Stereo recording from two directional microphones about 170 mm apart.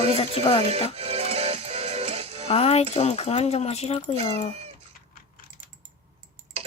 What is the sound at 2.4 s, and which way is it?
Speech, 35° left (ahead or behind).